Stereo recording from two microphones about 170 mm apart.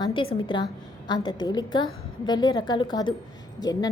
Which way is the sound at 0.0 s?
30° left (ahead or behind).